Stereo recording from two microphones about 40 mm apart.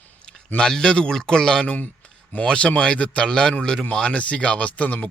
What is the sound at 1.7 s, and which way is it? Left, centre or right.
A man's voice, left.